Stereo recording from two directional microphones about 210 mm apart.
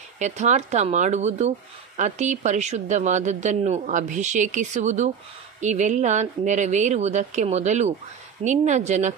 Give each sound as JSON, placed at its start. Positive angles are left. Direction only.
{"t": 0.2, "sound": "speech", "side_deg": -35}